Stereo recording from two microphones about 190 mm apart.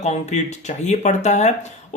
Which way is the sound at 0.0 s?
35° left (ahead or behind).